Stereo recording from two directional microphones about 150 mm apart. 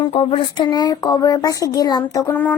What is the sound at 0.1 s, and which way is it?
A child's voice, 40° left (ahead or behind).